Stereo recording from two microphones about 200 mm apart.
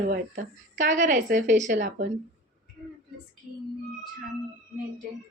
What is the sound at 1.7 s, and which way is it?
Speech, 55° right (ahead or behind).